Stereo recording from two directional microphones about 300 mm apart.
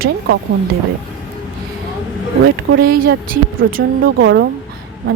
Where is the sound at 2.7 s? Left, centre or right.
Right.